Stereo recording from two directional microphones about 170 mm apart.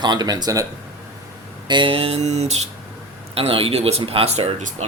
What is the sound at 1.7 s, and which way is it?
Speech, 30° right (ahead or behind).